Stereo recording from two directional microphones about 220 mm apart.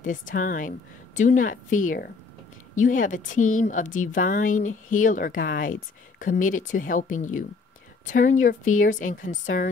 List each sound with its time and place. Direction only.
0.0 s speech: 35° left (ahead or behind)